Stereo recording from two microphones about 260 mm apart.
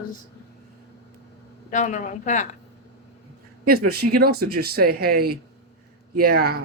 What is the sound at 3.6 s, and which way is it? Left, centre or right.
Speech, right.